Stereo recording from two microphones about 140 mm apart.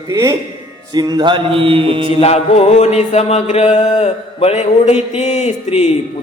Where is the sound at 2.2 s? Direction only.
50° left (ahead or behind).